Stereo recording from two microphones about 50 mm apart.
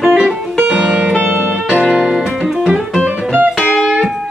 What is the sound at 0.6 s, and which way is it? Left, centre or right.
Music, centre.